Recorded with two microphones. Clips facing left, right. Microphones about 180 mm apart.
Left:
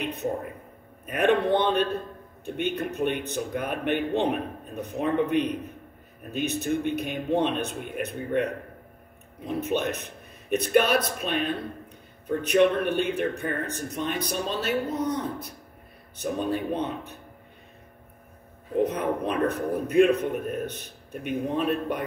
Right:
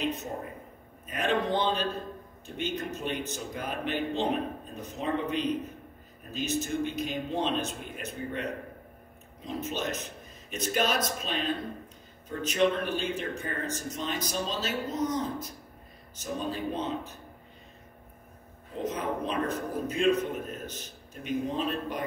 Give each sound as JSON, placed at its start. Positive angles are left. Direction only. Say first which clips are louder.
{"t": 0.0, "sound": "a sound", "louder": "left 2 dB", "side_deg": 60}
{"t": 1.0, "sound": "speech", "louder": "left 6 dB", "side_deg": 60}
{"t": 18.8, "sound": "speech", "louder": "left 6 dB", "side_deg": 60}